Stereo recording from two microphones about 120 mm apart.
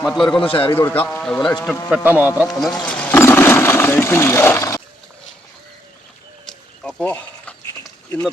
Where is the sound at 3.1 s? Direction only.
20° left (ahead or behind).